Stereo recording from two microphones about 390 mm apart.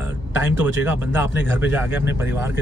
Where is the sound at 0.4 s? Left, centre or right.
Centre.